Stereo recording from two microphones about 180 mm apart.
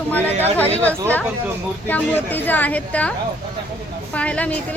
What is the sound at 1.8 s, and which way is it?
A woman's voice, 10° left (ahead or behind).